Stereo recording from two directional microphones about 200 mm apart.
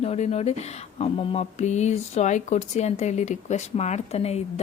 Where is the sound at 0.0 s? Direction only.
30° left (ahead or behind).